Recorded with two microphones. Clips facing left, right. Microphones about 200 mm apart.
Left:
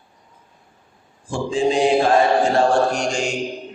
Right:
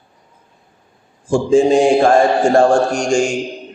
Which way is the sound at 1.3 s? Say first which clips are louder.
Right 8 dB; 45° right (ahead or behind).